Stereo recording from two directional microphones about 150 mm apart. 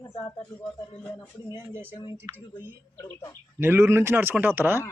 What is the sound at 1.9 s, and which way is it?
Speech, 30° left (ahead or behind).